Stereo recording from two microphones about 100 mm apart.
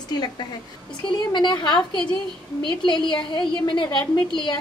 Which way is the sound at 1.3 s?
45° left (ahead or behind).